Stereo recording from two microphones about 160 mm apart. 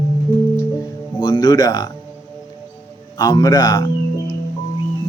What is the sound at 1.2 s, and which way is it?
Speech, 25° left (ahead or behind).